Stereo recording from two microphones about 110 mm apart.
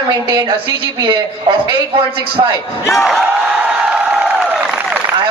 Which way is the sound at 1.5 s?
50° right (ahead or behind).